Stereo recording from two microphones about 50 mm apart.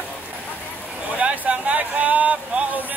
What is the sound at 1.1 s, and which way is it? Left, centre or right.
Speech, right.